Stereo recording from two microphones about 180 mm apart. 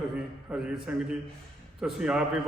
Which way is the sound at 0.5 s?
5° right (ahead or behind).